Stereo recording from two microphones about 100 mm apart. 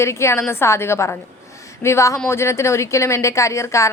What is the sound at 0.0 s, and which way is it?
A woman's voice, 30° left (ahead or behind).